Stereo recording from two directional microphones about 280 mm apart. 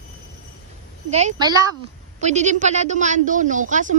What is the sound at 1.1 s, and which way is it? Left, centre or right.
Speech, right.